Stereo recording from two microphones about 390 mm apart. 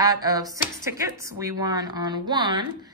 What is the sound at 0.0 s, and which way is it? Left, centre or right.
A woman's voice, centre.